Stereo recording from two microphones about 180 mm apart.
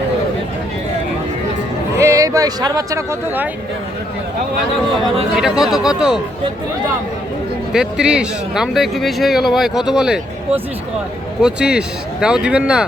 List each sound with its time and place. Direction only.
2.0 s speech: 20° right (ahead or behind)
5.4 s speech: 5° right (ahead or behind)
7.7 s speech: 5° right (ahead or behind)